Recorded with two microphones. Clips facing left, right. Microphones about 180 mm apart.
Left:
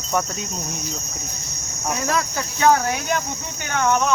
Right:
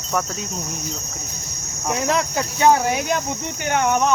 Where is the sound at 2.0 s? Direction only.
20° right (ahead or behind).